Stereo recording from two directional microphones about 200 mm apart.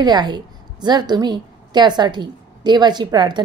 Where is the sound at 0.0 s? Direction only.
20° right (ahead or behind).